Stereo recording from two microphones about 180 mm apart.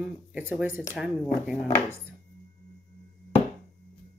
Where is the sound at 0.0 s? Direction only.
5° right (ahead or behind).